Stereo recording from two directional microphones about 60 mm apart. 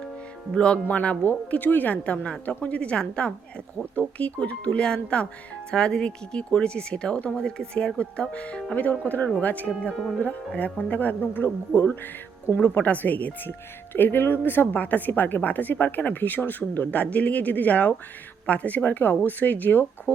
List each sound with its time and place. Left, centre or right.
0.5 s speech: centre
0.9 s a woman's voice: left
13.5 s a woman's voice: left